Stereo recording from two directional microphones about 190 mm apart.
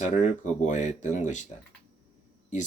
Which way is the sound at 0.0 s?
40° left (ahead or behind).